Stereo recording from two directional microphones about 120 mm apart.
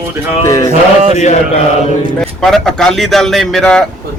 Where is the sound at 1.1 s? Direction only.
70° left (ahead or behind).